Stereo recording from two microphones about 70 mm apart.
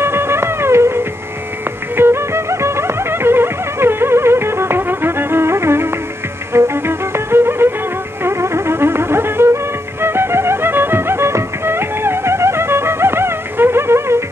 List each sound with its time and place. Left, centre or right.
0.0 s music: right